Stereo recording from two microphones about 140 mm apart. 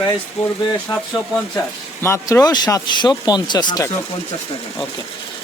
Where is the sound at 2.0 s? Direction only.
20° left (ahead or behind).